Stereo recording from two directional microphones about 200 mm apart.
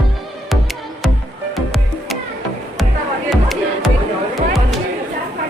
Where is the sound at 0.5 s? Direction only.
Centre (ahead or behind).